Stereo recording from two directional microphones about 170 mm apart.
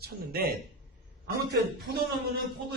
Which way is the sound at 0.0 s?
60° right (ahead or behind).